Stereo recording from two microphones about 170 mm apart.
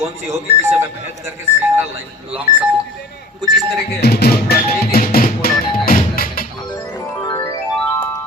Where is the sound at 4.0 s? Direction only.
65° left (ahead or behind).